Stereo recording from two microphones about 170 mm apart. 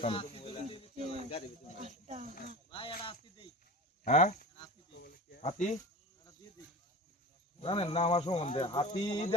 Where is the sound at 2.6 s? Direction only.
30° left (ahead or behind).